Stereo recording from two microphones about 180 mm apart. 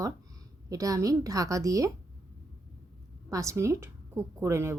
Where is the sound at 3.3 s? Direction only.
15° right (ahead or behind).